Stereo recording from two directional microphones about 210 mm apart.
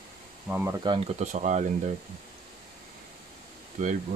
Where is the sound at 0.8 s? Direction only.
30° right (ahead or behind).